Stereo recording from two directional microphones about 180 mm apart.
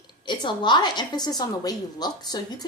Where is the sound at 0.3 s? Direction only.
25° left (ahead or behind).